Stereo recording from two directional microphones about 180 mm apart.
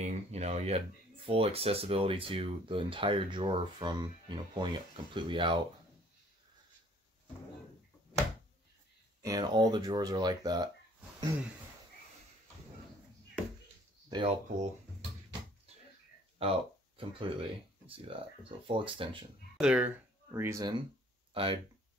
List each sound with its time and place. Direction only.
0.0 s speech: 40° right (ahead or behind)
9.2 s speech: 20° right (ahead or behind)
14.0 s speech: 25° right (ahead or behind)
16.3 s speech: 30° right (ahead or behind)
19.5 s speech: 5° right (ahead or behind)
21.3 s a sound: 30° right (ahead or behind)